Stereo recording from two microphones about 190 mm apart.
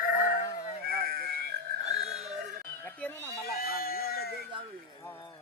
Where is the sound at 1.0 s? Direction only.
50° right (ahead or behind).